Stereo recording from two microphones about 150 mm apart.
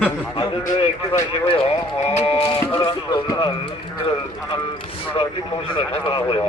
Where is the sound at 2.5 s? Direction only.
30° left (ahead or behind).